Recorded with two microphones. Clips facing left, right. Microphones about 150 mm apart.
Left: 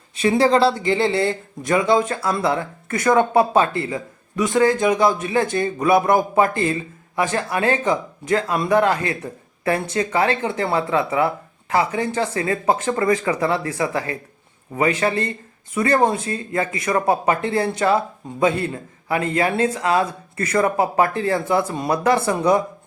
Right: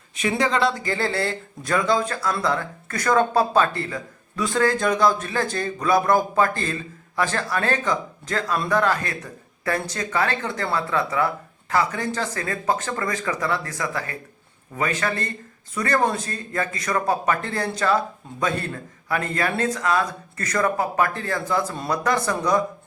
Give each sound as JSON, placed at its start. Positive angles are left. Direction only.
{"t": 0.2, "sound": "speech", "side_deg": 30}
{"t": 0.9, "sound": "a man's voice", "side_deg": 20}